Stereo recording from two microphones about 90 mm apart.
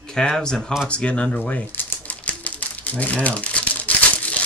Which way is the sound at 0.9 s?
15° left (ahead or behind).